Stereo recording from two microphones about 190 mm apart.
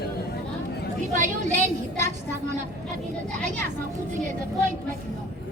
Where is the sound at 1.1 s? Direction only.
40° right (ahead or behind).